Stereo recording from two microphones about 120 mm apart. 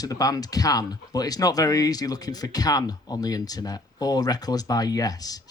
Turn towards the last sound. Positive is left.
turn(degrees=30)  # may be behind; listen again after turning